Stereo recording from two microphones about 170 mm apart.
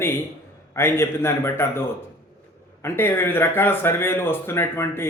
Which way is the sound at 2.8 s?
15° left (ahead or behind).